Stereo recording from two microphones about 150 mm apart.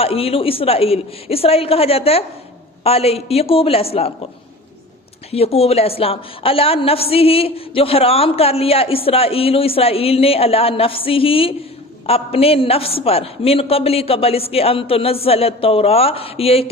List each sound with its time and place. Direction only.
0.0 s a woman's voice: 40° left (ahead or behind)
5.3 s a woman's voice: 40° left (ahead or behind)